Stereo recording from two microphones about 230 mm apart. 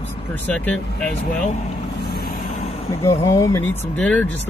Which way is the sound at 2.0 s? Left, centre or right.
Left.